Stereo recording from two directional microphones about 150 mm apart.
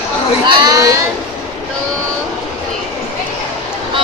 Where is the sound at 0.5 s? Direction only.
25° right (ahead or behind).